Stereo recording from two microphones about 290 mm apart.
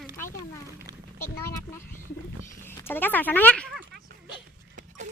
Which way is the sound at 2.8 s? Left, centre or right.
Centre.